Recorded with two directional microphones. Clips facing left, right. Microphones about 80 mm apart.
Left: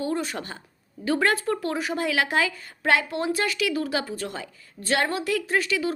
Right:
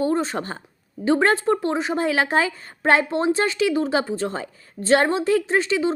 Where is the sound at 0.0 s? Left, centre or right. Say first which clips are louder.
Right 6 dB; right.